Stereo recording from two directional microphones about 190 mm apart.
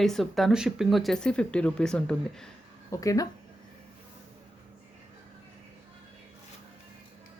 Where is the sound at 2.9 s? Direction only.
15° left (ahead or behind).